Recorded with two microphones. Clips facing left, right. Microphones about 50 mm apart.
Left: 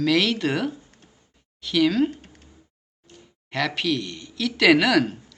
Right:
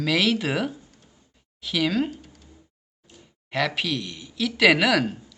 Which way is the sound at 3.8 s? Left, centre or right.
Centre.